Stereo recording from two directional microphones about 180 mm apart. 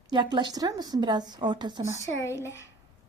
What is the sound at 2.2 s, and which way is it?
Speech, 15° left (ahead or behind).